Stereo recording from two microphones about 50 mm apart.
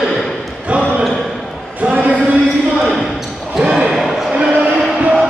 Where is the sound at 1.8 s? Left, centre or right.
Right.